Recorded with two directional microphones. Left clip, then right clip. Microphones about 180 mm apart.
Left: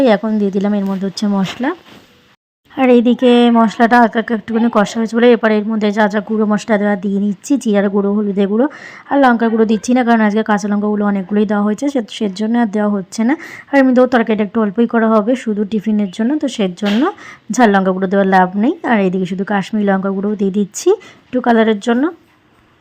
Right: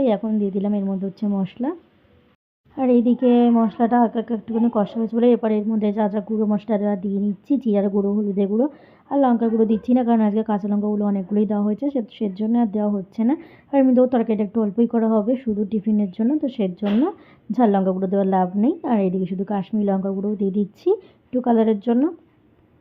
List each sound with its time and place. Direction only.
0.3 s a woman's voice: 25° left (ahead or behind)
2.7 s a woman's voice: 25° left (ahead or behind)
6.2 s speech: 35° left (ahead or behind)
6.5 s a woman's voice: 20° left (ahead or behind)
7.9 s speech: 35° left (ahead or behind)
8.5 s a woman's voice: 20° left (ahead or behind)
20.0 s speech: 30° left (ahead or behind)
20.3 s a woman's voice: 20° left (ahead or behind)